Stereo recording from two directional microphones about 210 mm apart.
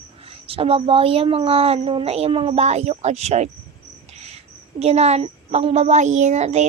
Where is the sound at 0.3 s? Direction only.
25° right (ahead or behind).